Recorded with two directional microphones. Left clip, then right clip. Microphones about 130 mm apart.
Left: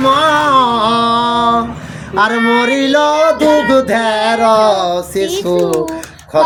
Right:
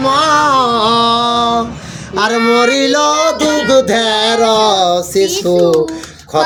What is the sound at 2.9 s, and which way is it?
Music, 30° right (ahead or behind).